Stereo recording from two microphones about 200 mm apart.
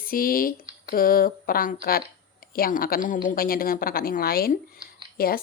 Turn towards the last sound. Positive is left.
turn(degrees=50)  # may be behind; listen again after turning